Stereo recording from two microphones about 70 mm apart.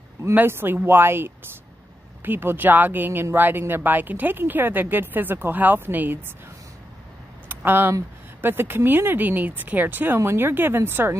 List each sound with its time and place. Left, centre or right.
0.2 s speech: right
7.4 s a sound: right
8.4 s speech: right